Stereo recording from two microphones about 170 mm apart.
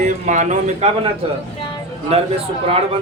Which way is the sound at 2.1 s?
35° right (ahead or behind).